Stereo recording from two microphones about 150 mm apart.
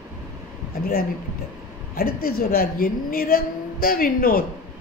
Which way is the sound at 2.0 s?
85° left.